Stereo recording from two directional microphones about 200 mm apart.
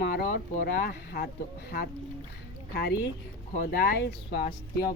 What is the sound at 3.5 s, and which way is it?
Speech, 50° left (ahead or behind).